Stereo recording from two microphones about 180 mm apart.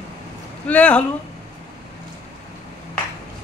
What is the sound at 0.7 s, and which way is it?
Speech, 5° left (ahead or behind).